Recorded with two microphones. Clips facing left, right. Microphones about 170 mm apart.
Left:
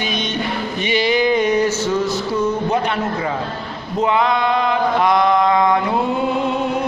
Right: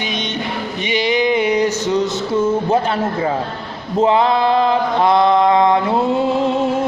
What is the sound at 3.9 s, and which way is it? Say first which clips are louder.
Mantra: right 3 dB; 30° right (ahead or behind).